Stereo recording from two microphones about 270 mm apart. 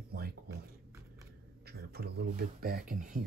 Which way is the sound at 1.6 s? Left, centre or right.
Right.